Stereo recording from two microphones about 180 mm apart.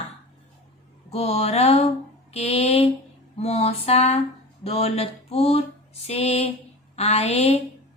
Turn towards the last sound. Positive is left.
turn(degrees=35)  # may be behind; listen again after turning